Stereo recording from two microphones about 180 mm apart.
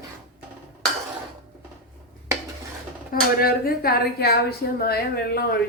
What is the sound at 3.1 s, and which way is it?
A woman's voice, 55° left (ahead or behind).